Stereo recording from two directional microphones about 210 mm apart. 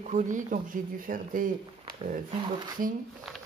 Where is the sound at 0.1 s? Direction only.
35° right (ahead or behind).